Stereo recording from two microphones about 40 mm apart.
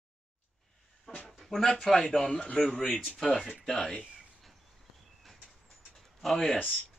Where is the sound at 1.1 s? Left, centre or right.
Left.